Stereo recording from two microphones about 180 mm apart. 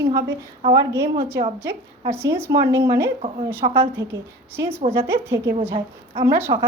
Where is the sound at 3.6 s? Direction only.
30° right (ahead or behind).